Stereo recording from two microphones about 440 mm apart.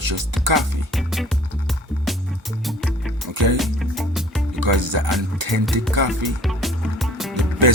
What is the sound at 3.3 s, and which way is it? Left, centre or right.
Music, right.